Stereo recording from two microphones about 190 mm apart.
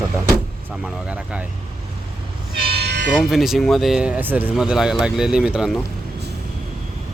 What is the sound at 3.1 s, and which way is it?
Speech, centre (ahead or behind).